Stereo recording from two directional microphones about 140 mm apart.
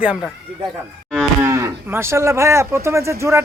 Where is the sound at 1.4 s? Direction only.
20° right (ahead or behind).